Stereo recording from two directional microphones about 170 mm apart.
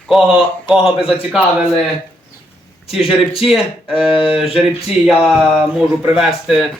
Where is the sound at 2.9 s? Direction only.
Centre (ahead or behind).